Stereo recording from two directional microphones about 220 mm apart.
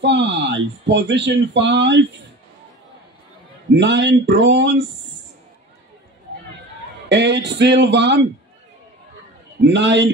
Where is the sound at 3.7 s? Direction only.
55° right (ahead or behind).